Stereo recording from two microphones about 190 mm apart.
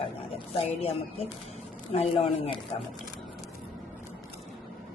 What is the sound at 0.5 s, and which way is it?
A woman's voice, 30° left (ahead or behind).